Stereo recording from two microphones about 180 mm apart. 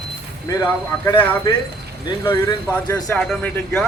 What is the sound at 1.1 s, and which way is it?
Speech, 10° left (ahead or behind).